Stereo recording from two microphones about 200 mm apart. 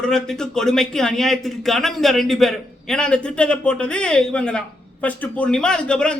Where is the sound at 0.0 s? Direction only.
5° left (ahead or behind).